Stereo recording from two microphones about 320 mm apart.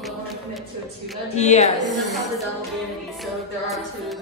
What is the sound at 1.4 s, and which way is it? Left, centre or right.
Speech, left.